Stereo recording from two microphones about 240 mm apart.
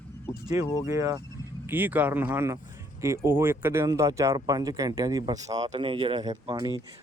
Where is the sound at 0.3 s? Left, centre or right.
Centre.